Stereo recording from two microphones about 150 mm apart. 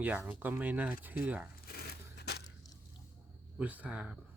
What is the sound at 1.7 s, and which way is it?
Crushing, 90° left.